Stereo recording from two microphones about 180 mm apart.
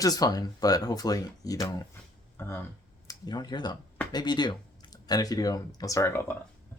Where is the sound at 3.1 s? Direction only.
25° left (ahead or behind).